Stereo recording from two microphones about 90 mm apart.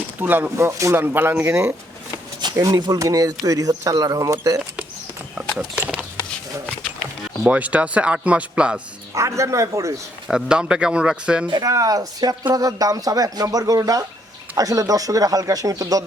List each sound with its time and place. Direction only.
0.2 s speech: 20° right (ahead or behind)
0.5 s speech: 30° right (ahead or behind)
1.0 s speech: 20° right (ahead or behind)
2.6 s speech: 45° right (ahead or behind)
7.4 s speech: 15° right (ahead or behind)
9.1 s speech: 35° right (ahead or behind)
10.2 s speech: 10° right (ahead or behind)
11.6 s speech: 40° right (ahead or behind)